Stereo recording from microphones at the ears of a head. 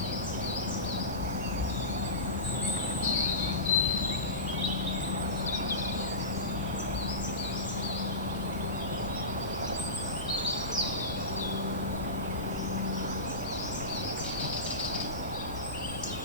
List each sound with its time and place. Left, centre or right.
3.1 s cricket: left